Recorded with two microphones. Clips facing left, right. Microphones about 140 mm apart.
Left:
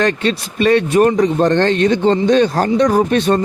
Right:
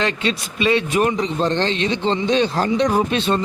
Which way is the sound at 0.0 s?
50° left (ahead or behind).